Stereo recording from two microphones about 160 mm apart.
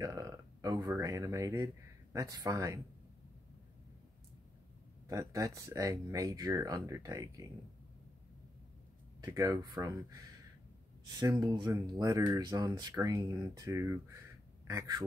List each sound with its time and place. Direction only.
0.0 s speech: 20° right (ahead or behind)
5.0 s speech: 20° right (ahead or behind)
9.2 s speech: 20° right (ahead or behind)